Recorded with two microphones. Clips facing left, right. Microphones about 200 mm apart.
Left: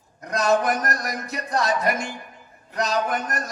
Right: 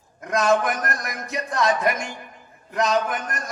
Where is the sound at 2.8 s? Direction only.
40° left (ahead or behind).